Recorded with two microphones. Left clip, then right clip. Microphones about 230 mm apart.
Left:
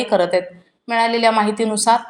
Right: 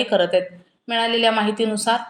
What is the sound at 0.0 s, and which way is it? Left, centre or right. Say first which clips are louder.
Speech: left 1 dB; left.